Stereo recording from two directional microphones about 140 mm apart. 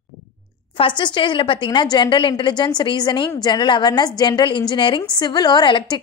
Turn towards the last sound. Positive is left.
turn(degrees=30)  # may be behind; listen again after turning